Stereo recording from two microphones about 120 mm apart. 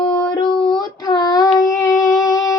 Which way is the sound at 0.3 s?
40° left (ahead or behind).